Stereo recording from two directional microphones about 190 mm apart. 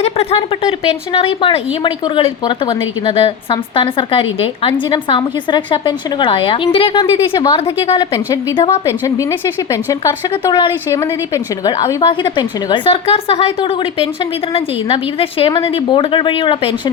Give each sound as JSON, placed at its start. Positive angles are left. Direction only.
{"t": 0.0, "sound": "a woman's voice", "side_deg": 30}